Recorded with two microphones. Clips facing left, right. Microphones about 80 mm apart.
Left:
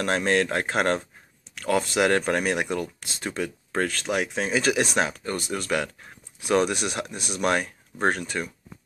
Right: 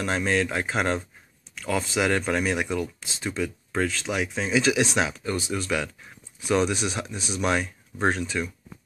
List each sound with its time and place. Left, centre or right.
0.0 s speech: left